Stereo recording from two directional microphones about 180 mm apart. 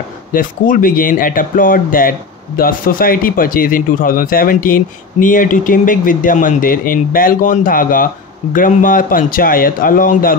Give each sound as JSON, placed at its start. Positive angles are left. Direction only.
{"t": 0.3, "sound": "speech", "side_deg": 50}